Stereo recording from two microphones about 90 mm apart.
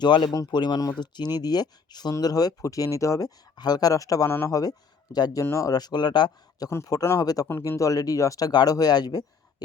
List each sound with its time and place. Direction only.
0.0 s speech: 65° left (ahead or behind)
0.5 s speech: 55° left (ahead or behind)
4.3 s speech: 25° left (ahead or behind)
5.1 s speech: 45° left (ahead or behind)
5.5 s speech: 35° left (ahead or behind)
5.7 s speech: 50° left (ahead or behind)
7.2 s speech: 45° left (ahead or behind)